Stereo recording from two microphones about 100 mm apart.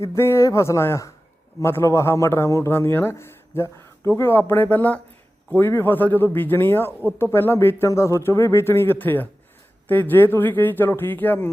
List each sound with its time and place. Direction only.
0.0 s a man's voice: 30° left (ahead or behind)